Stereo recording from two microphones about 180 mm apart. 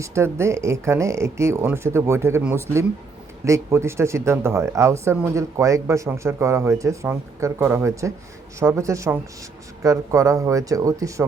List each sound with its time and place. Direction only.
0.0 s speech: 15° right (ahead or behind)